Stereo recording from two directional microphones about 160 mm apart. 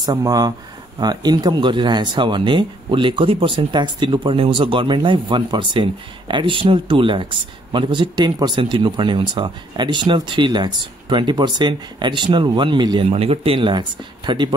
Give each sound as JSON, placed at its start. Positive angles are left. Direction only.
{"t": 0.0, "sound": "speech", "side_deg": -25}